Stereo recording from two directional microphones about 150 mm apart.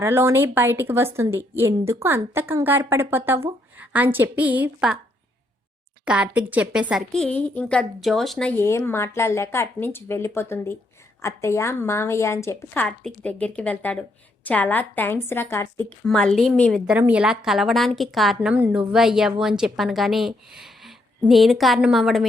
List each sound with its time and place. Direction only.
0.0 s a woman's voice: 15° right (ahead or behind)
6.1 s a woman's voice: 10° right (ahead or behind)
7.1 s a woman's voice: 5° left (ahead or behind)
16.0 s a woman's voice: 5° left (ahead or behind)
16.8 s a woman's voice: 10° right (ahead or behind)